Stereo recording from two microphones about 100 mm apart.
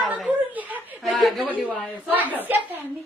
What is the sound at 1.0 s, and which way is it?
Chuckle, centre (ahead or behind).